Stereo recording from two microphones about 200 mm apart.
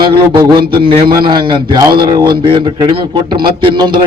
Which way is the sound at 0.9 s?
25° right (ahead or behind).